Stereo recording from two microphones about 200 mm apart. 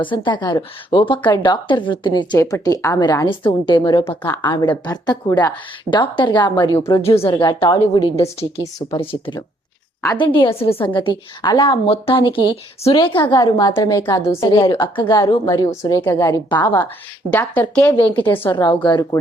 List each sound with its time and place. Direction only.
0.0 s a woman's voice: 25° left (ahead or behind)
17.3 s a woman's voice: 5° left (ahead or behind)
18.5 s a woman's voice: 25° left (ahead or behind)